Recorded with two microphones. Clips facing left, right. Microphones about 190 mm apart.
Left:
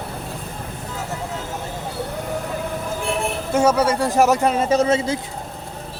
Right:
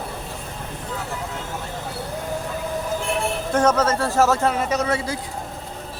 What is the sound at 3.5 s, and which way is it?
A man's voice, 10° left (ahead or behind).